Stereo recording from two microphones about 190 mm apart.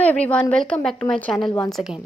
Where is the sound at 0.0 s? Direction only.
5° left (ahead or behind).